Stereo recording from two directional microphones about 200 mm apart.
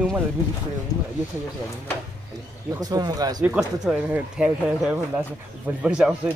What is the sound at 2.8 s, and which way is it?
Speech, 20° right (ahead or behind).